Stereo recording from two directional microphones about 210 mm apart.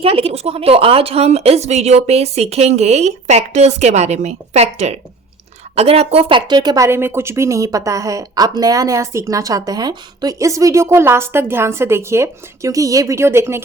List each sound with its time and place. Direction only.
0.0 s a woman's voice: 25° right (ahead or behind); by 13.6 s 10° right (ahead or behind)